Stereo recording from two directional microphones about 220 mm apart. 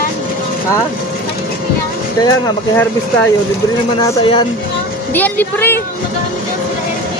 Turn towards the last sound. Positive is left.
turn(degrees=10)  # may be behind; listen again after turning